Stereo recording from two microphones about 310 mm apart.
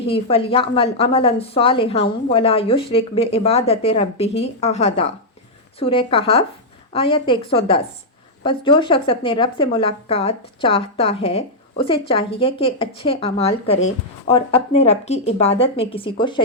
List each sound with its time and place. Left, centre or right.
0.1 s a woman's voice: centre